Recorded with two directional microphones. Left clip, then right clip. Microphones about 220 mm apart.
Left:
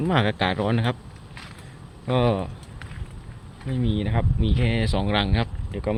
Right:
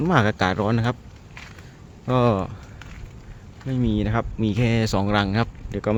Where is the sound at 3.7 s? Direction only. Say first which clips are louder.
Right 3 dB; 25° right (ahead or behind).